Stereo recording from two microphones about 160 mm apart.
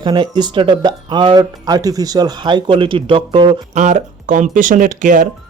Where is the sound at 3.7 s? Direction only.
50° right (ahead or behind).